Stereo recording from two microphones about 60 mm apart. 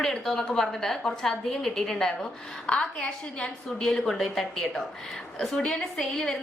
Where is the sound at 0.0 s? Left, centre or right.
Centre.